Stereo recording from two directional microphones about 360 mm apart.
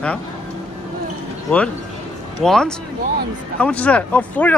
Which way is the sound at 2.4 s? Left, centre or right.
Centre.